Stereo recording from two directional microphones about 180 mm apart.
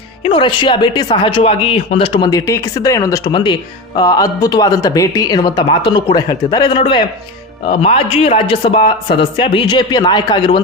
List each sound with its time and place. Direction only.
0.2 s speech: 30° left (ahead or behind)